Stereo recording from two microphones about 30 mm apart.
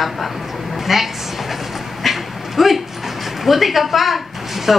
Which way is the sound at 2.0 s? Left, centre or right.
Centre.